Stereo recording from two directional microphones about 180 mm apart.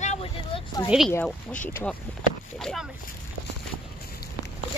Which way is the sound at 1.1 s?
10° left (ahead or behind).